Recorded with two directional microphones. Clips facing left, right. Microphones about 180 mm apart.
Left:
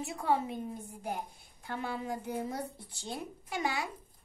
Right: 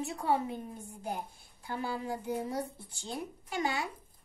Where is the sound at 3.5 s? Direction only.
20° left (ahead or behind).